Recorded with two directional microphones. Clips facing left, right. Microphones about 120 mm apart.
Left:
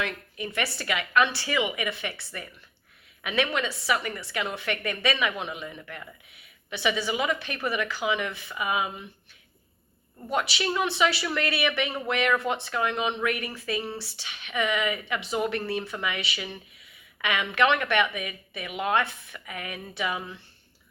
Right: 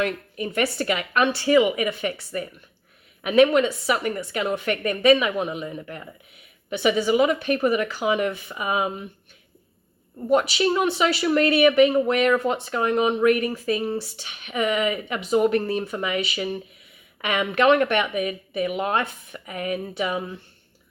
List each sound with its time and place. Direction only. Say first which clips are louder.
0.0 s a woman's voice: right 6 dB; 45° right (ahead or behind)
5.8 s speech: right 5 dB; 25° right (ahead or behind)
6.7 s a woman's voice: right 7 dB; 45° right (ahead or behind)
10.3 s a woman's voice: right 7 dB; 40° right (ahead or behind)